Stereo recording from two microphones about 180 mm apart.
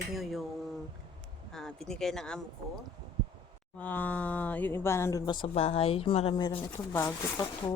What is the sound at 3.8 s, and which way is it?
Speech, 10° left (ahead or behind).